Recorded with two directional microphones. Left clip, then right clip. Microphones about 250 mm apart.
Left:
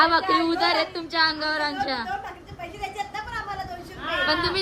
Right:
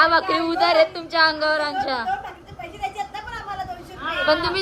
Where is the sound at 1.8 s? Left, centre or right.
Centre.